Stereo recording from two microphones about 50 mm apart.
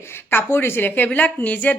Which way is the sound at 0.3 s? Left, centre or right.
Left.